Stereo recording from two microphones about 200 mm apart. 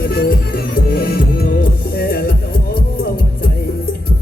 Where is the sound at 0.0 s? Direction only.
50° left (ahead or behind).